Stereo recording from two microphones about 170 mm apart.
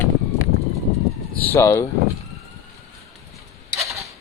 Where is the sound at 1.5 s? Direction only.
15° left (ahead or behind).